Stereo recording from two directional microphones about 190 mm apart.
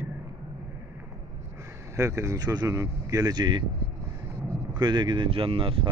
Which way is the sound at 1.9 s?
15° right (ahead or behind).